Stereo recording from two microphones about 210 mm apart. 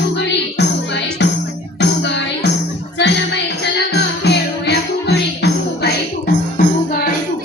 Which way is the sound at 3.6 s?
55° left (ahead or behind).